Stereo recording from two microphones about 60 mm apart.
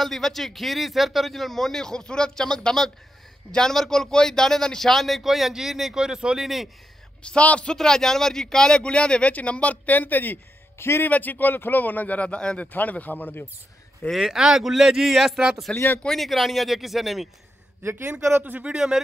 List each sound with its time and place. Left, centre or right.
0.0 s a man's voice: centre
7.2 s a man's voice: centre
7.7 s speech: centre; by 11.1 s left
11.1 s a man's voice: left
14.1 s a man's voice: centre
15.7 s speech: centre
16.1 s a man's voice: centre
17.8 s speech: right
18.4 s speech: right